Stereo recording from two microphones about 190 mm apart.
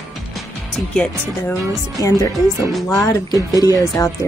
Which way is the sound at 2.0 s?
20° left (ahead or behind).